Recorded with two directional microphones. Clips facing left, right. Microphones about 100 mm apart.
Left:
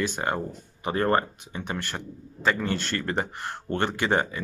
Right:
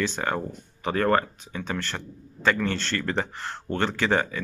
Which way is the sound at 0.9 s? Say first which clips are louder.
Right 1 dB; 25° left (ahead or behind).